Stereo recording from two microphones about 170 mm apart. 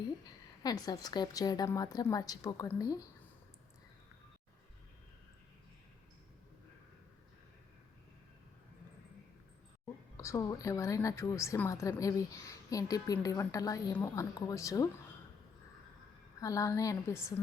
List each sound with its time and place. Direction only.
0.6 s a woman's voice: 25° left (ahead or behind)
10.2 s a woman's voice: 20° left (ahead or behind)
16.4 s a woman's voice: 20° left (ahead or behind)